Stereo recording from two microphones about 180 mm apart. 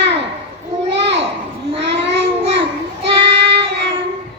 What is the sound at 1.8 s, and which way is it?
Child singing, 75° right (ahead or behind).